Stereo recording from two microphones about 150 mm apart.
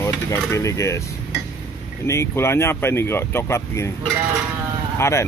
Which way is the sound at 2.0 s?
20° left (ahead or behind).